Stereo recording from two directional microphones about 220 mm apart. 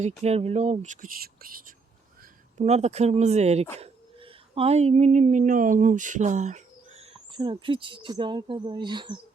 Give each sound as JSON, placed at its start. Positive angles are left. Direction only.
{"t": 0.2, "sound": "speech", "side_deg": -30}
{"t": 2.6, "sound": "speech", "side_deg": -30}